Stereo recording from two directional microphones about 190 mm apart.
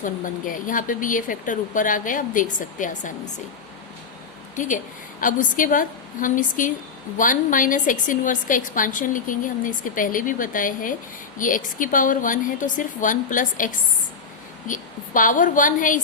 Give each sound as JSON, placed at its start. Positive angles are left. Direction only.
{"t": 0.0, "sound": "a woman's voice", "side_deg": 45}
{"t": 4.5, "sound": "a woman's voice", "side_deg": 40}